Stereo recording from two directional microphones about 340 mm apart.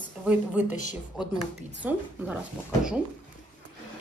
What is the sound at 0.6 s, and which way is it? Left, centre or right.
Speech, left.